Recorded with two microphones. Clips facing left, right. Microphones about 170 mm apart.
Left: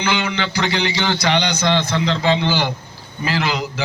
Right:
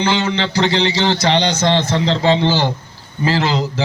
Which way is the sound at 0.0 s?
25° right (ahead or behind).